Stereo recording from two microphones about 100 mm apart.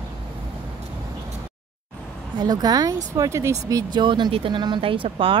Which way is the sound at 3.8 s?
50° right (ahead or behind).